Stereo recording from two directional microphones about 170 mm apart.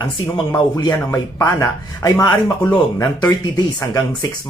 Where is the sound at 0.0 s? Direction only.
25° left (ahead or behind).